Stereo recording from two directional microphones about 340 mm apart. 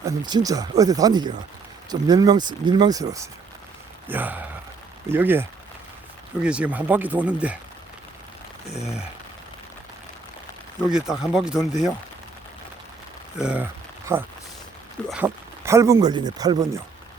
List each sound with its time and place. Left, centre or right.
0.0 s speech: centre
8.7 s speech: centre
10.8 s speech: centre
13.4 s speech: centre